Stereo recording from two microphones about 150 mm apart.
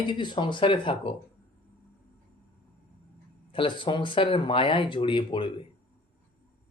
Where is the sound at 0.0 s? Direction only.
30° left (ahead or behind).